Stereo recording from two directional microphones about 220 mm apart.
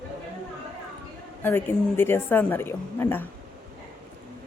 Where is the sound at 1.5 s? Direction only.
10° left (ahead or behind).